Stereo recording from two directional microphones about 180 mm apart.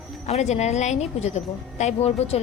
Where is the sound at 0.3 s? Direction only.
40° left (ahead or behind).